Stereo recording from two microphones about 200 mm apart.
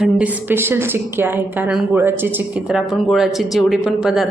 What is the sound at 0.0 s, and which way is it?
A woman's voice, 10° right (ahead or behind).